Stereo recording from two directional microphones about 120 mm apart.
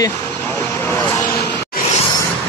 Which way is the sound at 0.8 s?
20° left (ahead or behind).